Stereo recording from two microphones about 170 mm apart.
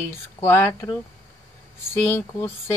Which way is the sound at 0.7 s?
25° left (ahead or behind).